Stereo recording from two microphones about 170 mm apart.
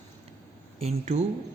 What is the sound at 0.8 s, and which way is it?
Speech, 40° right (ahead or behind).